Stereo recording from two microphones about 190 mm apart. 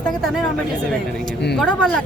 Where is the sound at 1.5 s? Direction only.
5° left (ahead or behind).